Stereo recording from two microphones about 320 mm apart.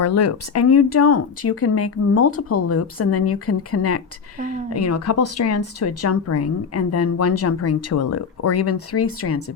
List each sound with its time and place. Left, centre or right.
0.0 s speech: left